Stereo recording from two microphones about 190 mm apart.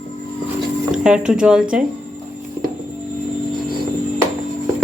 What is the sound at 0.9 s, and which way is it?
Speech, 5° right (ahead or behind).